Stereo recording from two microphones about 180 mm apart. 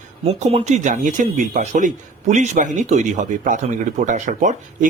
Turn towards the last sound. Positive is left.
turn(degrees=-45)  # may be behind; listen again after turning